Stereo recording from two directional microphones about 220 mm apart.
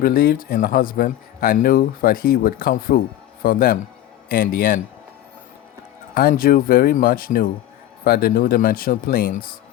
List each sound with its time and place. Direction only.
0.0 s speech: 40° left (ahead or behind)
6.1 s speech: 40° left (ahead or behind)